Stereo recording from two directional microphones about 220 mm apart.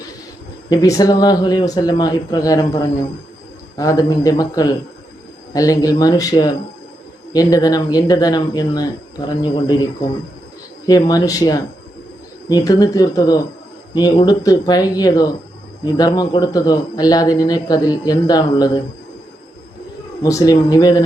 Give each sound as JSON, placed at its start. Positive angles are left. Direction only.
{"t": 0.7, "sound": "speech", "side_deg": 15}
{"t": 10.8, "sound": "speech", "side_deg": 15}
{"t": 20.2, "sound": "speech", "side_deg": 15}